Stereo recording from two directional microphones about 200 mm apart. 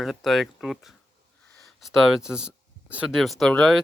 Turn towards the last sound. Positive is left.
turn(degrees=0)  # may be behind; listen again after turning